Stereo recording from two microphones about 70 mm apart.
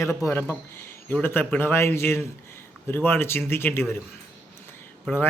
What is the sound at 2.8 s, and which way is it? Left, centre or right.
Speech, left.